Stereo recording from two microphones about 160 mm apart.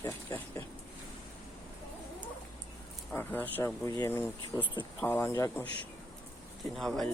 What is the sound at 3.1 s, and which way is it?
Speech, 10° left (ahead or behind).